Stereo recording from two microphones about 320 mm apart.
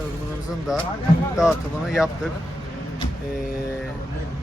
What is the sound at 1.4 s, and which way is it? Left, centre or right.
Speech, centre.